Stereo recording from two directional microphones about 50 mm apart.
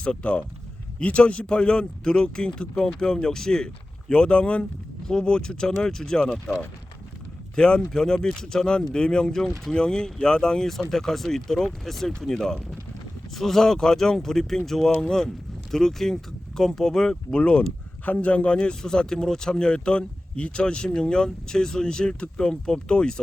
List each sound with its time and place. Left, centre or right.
0.0 s speech: left
18.0 s speech: left
18.5 s speech: centre